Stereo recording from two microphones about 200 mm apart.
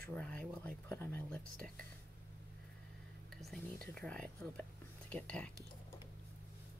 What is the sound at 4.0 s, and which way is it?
Speech, 5° left (ahead or behind).